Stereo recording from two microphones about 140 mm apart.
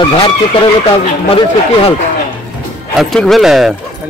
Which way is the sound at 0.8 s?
40° left (ahead or behind).